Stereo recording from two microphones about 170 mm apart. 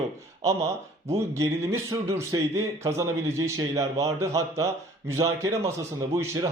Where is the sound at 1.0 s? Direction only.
15° right (ahead or behind).